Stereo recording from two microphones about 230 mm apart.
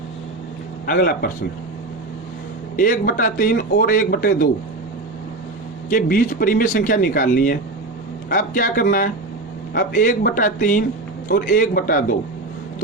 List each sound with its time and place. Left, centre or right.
0.9 s a man's voice: left
2.7 s a man's voice: left
5.9 s a man's voice: left